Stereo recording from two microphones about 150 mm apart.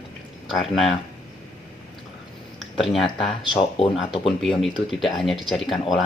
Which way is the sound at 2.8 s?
Centre (ahead or behind).